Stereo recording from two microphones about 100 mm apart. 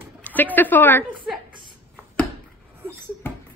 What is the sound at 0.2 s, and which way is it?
Speech, 15° left (ahead or behind).